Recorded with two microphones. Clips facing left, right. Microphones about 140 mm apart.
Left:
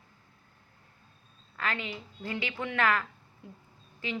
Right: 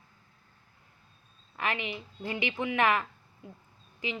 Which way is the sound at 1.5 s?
15° right (ahead or behind).